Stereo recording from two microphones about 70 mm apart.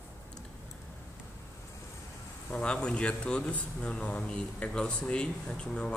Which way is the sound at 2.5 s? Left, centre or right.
Centre.